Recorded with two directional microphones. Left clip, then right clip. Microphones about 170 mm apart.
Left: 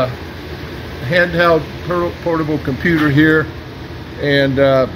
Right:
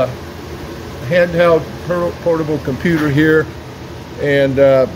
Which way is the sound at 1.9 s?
15° right (ahead or behind).